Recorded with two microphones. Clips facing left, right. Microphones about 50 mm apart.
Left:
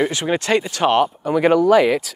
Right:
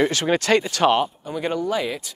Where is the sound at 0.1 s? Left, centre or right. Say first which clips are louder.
Even; centre.